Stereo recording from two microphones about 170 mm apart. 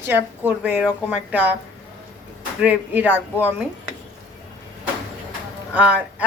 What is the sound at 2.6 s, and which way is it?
Speech, 10° right (ahead or behind).